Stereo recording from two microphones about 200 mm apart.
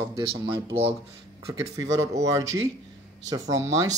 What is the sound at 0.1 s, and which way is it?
Speech, 25° right (ahead or behind).